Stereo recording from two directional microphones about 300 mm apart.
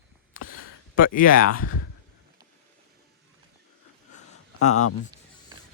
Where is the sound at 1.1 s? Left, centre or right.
Left.